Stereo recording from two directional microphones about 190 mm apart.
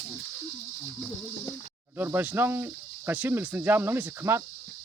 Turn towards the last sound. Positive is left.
turn(degrees=-10)  # may be behind; listen again after turning